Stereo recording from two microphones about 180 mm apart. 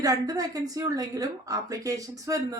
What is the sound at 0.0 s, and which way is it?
A woman's voice, 20° right (ahead or behind).